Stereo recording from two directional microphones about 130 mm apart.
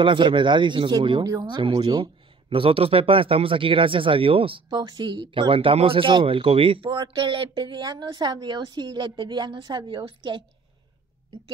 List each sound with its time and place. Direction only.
0.0 s speech: 40° right (ahead or behind)
2.5 s speech: 45° right (ahead or behind)